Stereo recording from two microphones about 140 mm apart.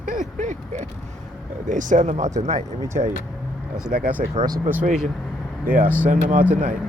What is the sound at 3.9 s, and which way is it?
Speech, 65° right (ahead or behind).